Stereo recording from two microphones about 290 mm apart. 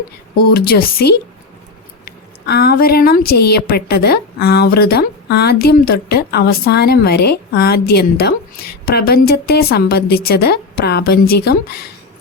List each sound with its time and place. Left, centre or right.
0.5 s a woman's voice: left